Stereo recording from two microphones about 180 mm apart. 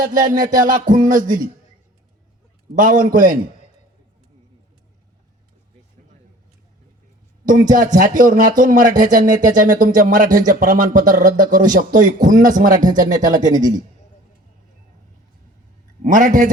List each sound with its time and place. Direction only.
0.0 s speech: 50° right (ahead or behind)
2.7 s speech: 50° right (ahead or behind)
7.7 s speech: 45° right (ahead or behind)
13.1 s a man's voice: 20° right (ahead or behind)
16.0 s speech: 45° right (ahead or behind)